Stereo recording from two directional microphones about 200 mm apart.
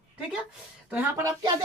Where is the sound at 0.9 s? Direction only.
15° right (ahead or behind).